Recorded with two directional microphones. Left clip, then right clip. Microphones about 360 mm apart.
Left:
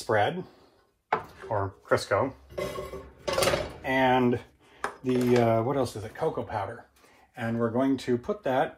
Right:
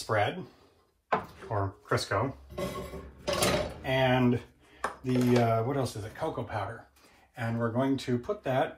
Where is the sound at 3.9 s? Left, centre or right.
Left.